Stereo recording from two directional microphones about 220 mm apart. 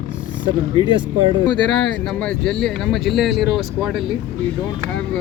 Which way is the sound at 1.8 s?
5° left (ahead or behind).